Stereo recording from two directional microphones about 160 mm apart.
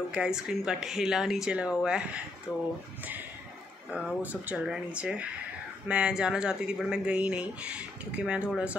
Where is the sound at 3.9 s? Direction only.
10° right (ahead or behind).